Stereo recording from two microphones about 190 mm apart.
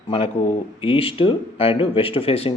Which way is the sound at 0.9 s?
30° left (ahead or behind).